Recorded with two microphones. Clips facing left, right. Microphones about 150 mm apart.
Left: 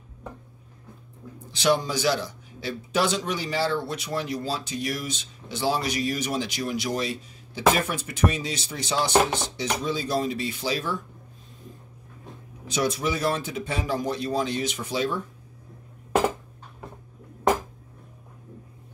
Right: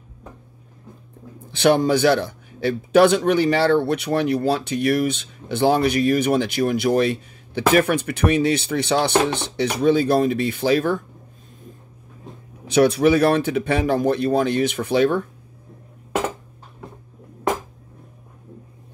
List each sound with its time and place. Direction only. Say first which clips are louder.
1.5 s a man's voice: right 7 dB; 55° right (ahead or behind)
12.6 s a man's voice: right 10 dB; 65° right (ahead or behind)